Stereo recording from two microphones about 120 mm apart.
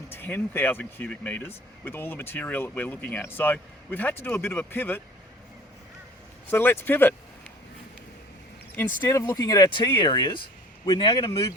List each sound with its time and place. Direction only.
0.1 s speech: 20° left (ahead or behind)
6.5 s speech: 20° left (ahead or behind)
9.0 s speech: 25° left (ahead or behind)
11.3 s speech: 25° left (ahead or behind)